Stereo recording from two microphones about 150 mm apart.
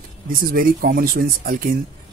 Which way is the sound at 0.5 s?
75° right (ahead or behind).